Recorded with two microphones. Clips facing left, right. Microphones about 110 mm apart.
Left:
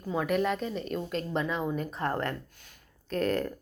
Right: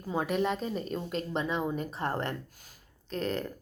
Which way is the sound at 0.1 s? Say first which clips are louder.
Left 1 dB; 30° right (ahead or behind).